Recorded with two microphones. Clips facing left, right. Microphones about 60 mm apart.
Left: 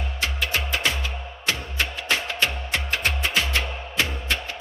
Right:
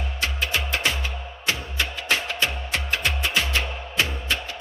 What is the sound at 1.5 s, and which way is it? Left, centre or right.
Music, left.